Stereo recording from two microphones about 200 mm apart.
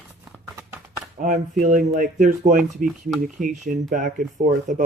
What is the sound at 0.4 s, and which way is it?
Clip-clop, 15° right (ahead or behind).